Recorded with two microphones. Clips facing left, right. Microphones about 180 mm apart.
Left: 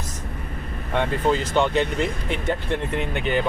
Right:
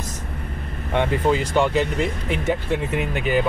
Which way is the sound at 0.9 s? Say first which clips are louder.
Right 2 dB; 10° right (ahead or behind).